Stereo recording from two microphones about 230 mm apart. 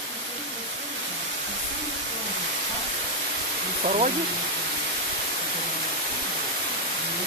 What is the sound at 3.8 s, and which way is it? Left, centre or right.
Speech, right.